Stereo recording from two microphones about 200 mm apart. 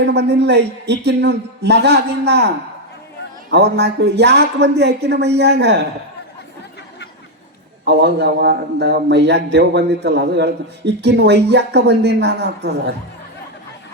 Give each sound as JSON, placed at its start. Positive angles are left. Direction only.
{"t": 0.0, "sound": "a man's voice", "side_deg": -55}
{"t": 3.5, "sound": "a man's voice", "side_deg": -55}
{"t": 7.9, "sound": "a man's voice", "side_deg": -60}